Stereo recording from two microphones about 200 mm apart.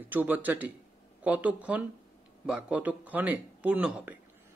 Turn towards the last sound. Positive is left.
turn(degrees=-5)  # may be behind; listen again after turning